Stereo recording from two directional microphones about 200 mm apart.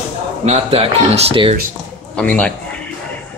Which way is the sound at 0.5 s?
30° right (ahead or behind).